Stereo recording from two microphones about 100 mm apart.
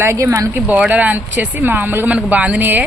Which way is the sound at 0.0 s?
30° right (ahead or behind).